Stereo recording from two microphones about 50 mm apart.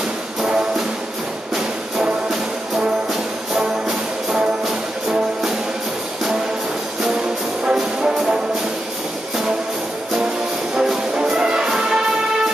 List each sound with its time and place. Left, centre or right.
0.4 s music: centre
7.6 s music: centre
10.8 s music: centre